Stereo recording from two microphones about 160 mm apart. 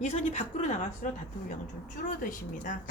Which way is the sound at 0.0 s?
45° left (ahead or behind).